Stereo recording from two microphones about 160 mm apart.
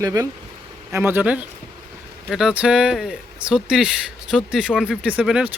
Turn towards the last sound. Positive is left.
turn(degrees=-5)  # may be behind; listen again after turning